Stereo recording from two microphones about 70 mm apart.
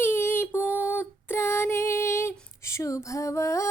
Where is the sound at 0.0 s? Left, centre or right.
Left.